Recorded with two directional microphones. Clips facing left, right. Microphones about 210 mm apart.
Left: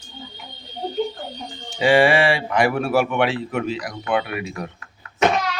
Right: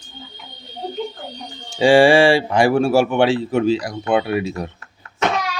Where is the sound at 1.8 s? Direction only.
30° right (ahead or behind).